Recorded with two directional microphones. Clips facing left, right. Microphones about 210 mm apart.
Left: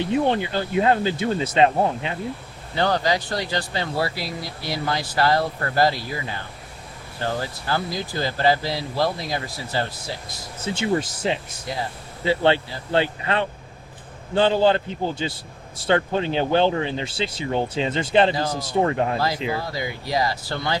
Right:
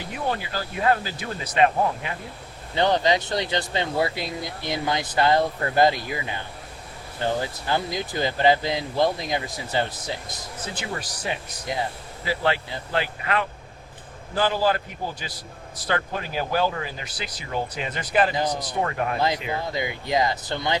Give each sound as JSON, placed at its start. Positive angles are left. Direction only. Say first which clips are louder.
{"t": 0.0, "sound": "speech", "louder": "left 8 dB", "side_deg": 25}
{"t": 2.7, "sound": "speech", "louder": "right 1 dB", "side_deg": -20}
{"t": 7.3, "sound": "speech", "louder": "even", "side_deg": -20}
{"t": 10.8, "sound": "speech", "louder": "left 13 dB", "side_deg": 25}
{"t": 19.5, "sound": "speech", "louder": "left 1 dB", "side_deg": -20}